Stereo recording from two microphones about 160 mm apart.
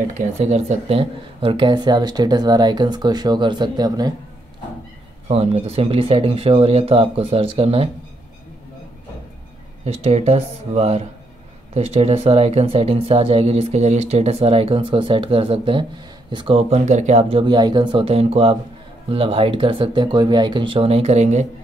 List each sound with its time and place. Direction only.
0.2 s speech: 45° right (ahead or behind); by 4.1 s 25° right (ahead or behind)
5.3 s speech: 40° right (ahead or behind)
9.8 s speech: 40° right (ahead or behind)